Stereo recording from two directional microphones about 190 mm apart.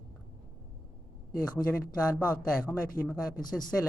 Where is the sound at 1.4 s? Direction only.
20° left (ahead or behind).